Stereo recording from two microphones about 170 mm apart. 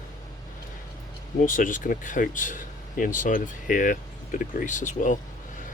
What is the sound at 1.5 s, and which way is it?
Speech, 50° left (ahead or behind).